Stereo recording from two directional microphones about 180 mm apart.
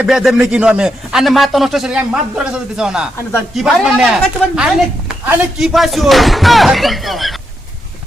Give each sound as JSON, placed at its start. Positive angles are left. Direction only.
{"t": 0.0, "sound": "a man's voice", "side_deg": -5}